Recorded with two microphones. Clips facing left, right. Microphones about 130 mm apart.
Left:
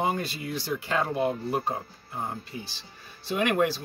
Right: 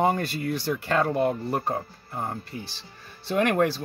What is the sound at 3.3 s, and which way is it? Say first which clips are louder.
Speech: right 2 dB; 50° right (ahead or behind).